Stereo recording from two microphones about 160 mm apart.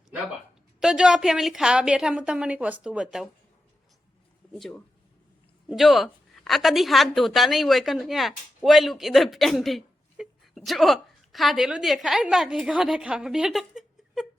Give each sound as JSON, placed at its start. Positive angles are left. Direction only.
{"t": 0.8, "sound": "a woman's voice", "side_deg": -5}
{"t": 4.4, "sound": "a sound", "side_deg": 5}
{"t": 5.6, "sound": "a woman's voice", "side_deg": 0}